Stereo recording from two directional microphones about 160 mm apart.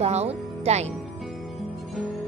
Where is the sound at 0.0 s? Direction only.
40° right (ahead or behind).